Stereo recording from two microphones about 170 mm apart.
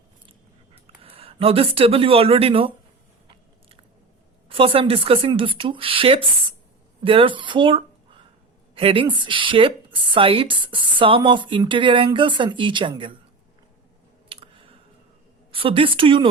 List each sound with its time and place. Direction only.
1.0 s speech: 35° right (ahead or behind)
4.4 s speech: 30° right (ahead or behind)
14.3 s a sound: 30° right (ahead or behind)
15.5 s speech: 30° right (ahead or behind)